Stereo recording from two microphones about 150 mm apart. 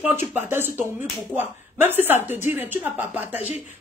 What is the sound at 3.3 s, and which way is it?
Speech, 45° left (ahead or behind).